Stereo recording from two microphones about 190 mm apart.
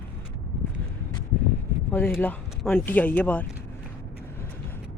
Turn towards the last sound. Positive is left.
turn(degrees=10)  # may be behind; listen again after turning